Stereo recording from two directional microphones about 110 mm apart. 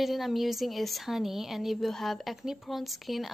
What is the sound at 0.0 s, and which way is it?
A woman's voice, centre (ahead or behind).